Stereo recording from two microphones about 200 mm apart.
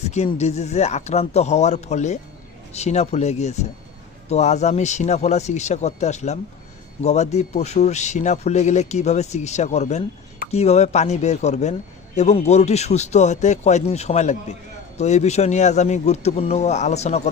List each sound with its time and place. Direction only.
0.1 s a man's voice: 35° left (ahead or behind)